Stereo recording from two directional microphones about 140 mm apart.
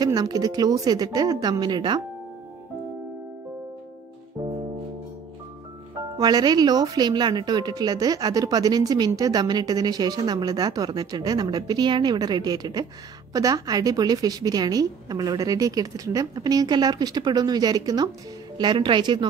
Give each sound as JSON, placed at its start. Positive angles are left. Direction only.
{"t": 0.0, "sound": "speech", "side_deg": -30}
{"t": 6.1, "sound": "speech", "side_deg": -30}